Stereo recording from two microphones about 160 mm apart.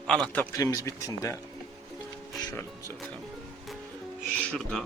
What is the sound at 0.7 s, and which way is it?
Speech, 20° left (ahead or behind).